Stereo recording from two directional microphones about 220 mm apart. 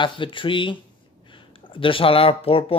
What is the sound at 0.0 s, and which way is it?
Speech, 20° left (ahead or behind).